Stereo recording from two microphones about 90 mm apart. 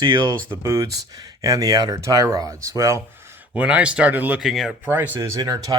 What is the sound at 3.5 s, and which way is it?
Speech, 15° right (ahead or behind).